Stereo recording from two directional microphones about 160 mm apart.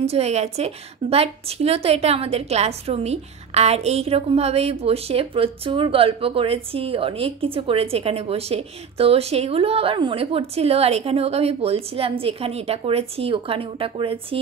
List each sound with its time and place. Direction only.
0.0 s a woman's voice: 40° right (ahead or behind)